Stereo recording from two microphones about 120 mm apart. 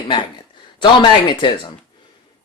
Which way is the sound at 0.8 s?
40° left (ahead or behind).